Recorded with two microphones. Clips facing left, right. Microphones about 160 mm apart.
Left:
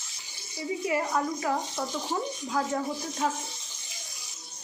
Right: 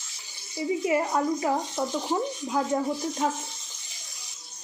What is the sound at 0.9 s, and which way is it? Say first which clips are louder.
Speech: right 2 dB; 25° right (ahead or behind).